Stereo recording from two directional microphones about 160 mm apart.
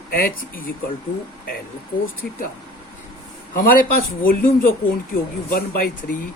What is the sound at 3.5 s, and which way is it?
Speech, 60° left (ahead or behind).